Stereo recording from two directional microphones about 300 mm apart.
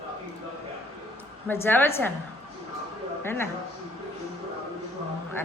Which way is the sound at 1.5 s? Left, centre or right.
Centre.